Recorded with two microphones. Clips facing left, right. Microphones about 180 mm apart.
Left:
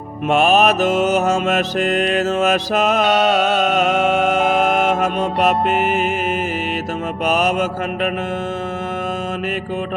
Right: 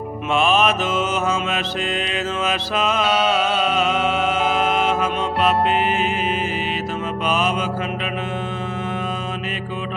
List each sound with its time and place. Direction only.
0.3 s mantra: 45° left (ahead or behind)
7.3 s mantra: 45° left (ahead or behind)